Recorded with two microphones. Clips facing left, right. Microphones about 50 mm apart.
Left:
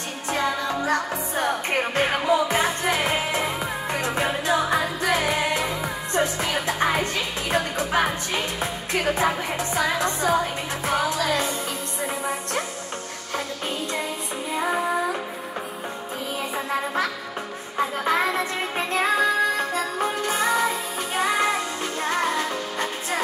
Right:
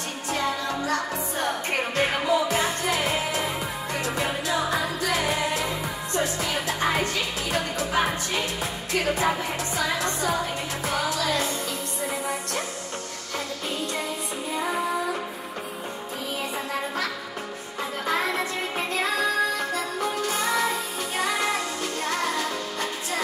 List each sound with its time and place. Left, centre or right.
0.3 s music: left
17.7 s music: left